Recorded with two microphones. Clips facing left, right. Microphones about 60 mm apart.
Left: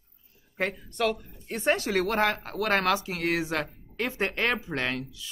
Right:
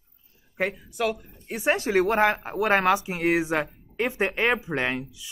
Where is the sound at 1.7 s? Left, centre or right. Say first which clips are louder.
Right 4 dB; right.